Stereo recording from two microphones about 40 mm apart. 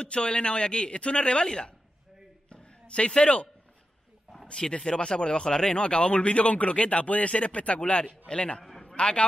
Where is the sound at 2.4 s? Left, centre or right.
Left.